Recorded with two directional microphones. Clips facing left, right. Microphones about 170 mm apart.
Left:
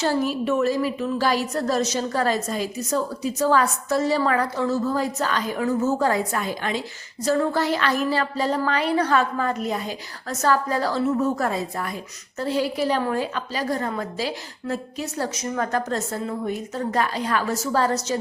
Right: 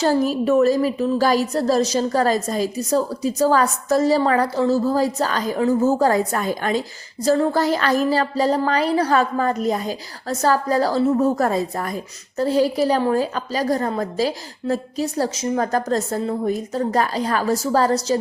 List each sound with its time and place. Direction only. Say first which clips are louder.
0.0 s a woman's voice: right 4 dB; 40° right (ahead or behind)